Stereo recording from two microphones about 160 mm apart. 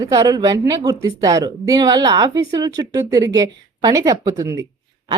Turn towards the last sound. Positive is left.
turn(degrees=-20)  # may be behind; listen again after turning